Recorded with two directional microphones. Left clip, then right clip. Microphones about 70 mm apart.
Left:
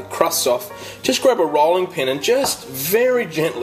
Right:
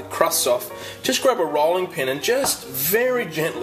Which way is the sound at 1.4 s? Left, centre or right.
Left.